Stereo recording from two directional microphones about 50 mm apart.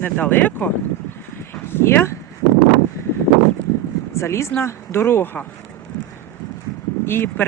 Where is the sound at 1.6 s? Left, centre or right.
Left.